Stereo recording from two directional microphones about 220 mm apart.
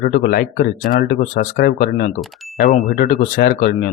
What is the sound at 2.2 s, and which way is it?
Speech, centre (ahead or behind).